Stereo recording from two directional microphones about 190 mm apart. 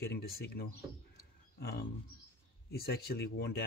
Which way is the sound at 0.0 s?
55° left (ahead or behind).